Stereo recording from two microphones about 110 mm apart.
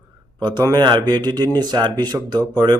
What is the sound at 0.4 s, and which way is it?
Speech, 40° right (ahead or behind).